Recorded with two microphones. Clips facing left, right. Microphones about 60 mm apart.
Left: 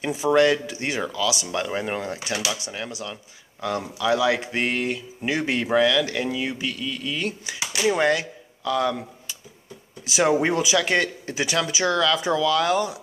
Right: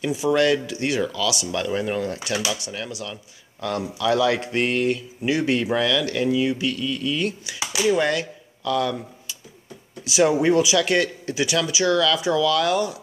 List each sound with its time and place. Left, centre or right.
0.0 s speech: left
10.0 s speech: left